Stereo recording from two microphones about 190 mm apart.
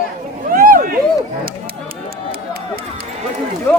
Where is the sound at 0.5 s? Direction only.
45° right (ahead or behind).